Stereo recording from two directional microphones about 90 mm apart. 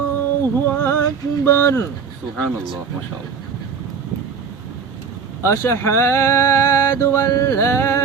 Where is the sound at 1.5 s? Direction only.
30° left (ahead or behind).